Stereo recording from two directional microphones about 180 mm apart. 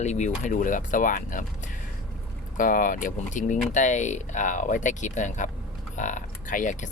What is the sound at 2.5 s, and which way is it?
Speech, 50° left (ahead or behind).